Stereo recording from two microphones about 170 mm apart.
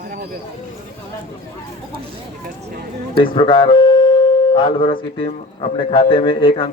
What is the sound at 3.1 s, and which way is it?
Music, 30° left (ahead or behind).